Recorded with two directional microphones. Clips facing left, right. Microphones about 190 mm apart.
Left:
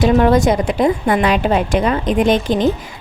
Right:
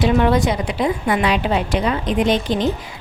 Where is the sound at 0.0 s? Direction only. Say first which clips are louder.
Left 4 dB; 45° left (ahead or behind).